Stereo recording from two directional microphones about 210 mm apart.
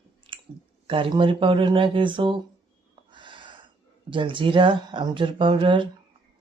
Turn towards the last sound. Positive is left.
turn(degrees=-25)  # may be behind; listen again after turning